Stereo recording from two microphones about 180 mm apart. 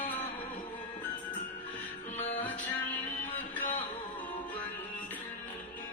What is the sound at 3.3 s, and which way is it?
Music, 10° left (ahead or behind).